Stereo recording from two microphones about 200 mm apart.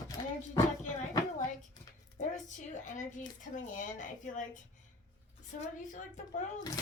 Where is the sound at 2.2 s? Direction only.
35° left (ahead or behind).